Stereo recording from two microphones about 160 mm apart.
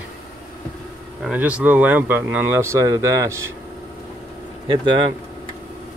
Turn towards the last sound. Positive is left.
turn(degrees=-30)  # may be behind; listen again after turning